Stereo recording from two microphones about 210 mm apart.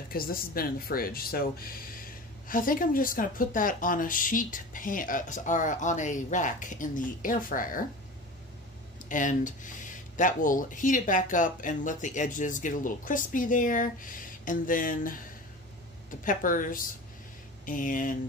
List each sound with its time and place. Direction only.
0.1 s speech: 45° left (ahead or behind)
9.1 s speech: 40° left (ahead or behind)